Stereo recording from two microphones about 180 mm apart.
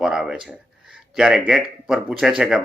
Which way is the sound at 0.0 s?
5° right (ahead or behind).